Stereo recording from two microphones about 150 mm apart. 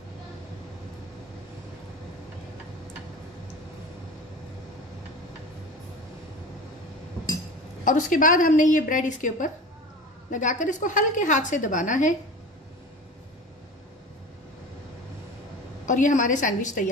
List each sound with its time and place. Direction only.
7.8 s a woman's voice: 60° left (ahead or behind)
15.8 s a woman's voice: 60° left (ahead or behind)